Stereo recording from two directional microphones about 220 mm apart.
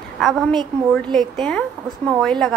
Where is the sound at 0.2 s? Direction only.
Centre (ahead or behind).